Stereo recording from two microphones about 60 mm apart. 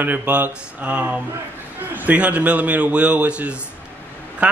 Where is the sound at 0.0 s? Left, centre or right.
Right.